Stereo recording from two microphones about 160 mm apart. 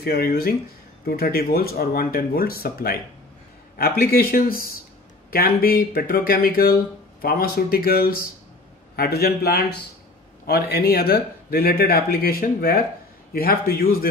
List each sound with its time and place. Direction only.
0.0 s speech: 75° left (ahead or behind)
4.0 s speech: 70° left (ahead or behind)